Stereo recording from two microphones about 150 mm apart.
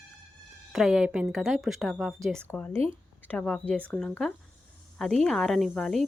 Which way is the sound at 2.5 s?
15° left (ahead or behind).